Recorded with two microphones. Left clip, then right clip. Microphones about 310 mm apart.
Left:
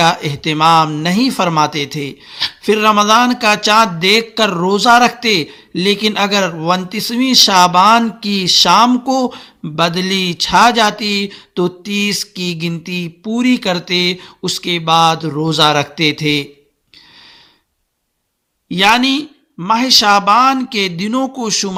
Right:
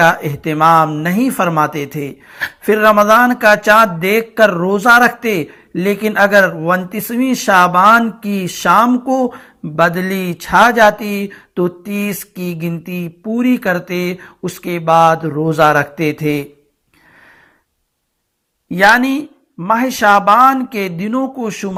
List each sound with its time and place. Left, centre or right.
0.0 s speech: centre
12.7 s speech: centre
18.8 s speech: centre